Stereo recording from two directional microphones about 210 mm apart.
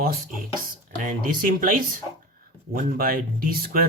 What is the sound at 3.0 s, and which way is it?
Speech, 45° right (ahead or behind).